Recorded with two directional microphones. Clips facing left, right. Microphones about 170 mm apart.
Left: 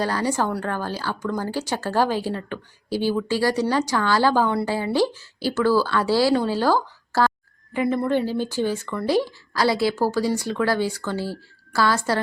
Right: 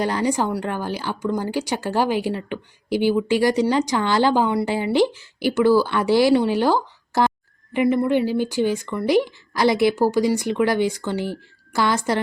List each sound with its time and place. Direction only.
0.0 s speech: 20° right (ahead or behind)